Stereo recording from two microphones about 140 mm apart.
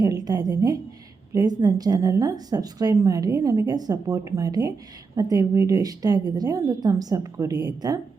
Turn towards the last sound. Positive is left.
turn(degrees=-30)  # may be behind; listen again after turning